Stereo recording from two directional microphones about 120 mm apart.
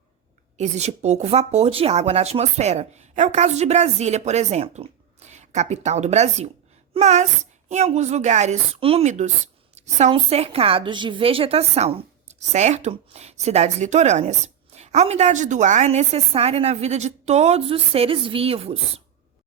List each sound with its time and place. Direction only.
0.5 s speech: 70° right (ahead or behind)
8.8 s a woman's voice: 55° right (ahead or behind)